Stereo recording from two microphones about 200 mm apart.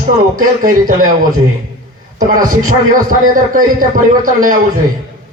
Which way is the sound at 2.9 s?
45° right (ahead or behind).